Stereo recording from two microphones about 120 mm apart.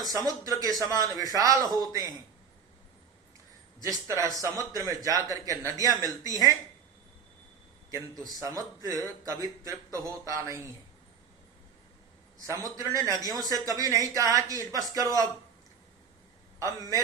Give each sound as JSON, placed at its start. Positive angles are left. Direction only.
{"t": 0.0, "sound": "a man's voice", "side_deg": -30}
{"t": 3.8, "sound": "a man's voice", "side_deg": -25}
{"t": 7.9, "sound": "a man's voice", "side_deg": -30}
{"t": 12.5, "sound": "a man's voice", "side_deg": -25}
{"t": 16.6, "sound": "a man's voice", "side_deg": -30}